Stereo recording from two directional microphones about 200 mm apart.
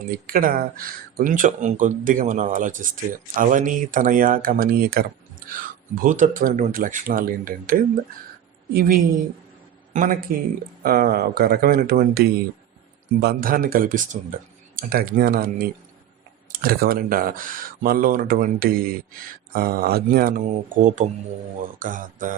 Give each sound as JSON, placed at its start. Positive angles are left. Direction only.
{"t": 0.1, "sound": "a man's voice", "side_deg": -45}